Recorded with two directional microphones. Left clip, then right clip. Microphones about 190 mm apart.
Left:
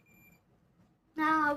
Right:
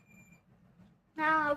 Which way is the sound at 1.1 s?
35° left (ahead or behind).